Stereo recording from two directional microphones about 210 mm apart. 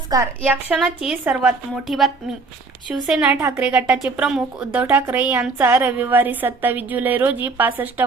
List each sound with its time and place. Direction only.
0.1 s a woman's voice: 15° right (ahead or behind)
0.7 s a woman's voice: centre (ahead or behind)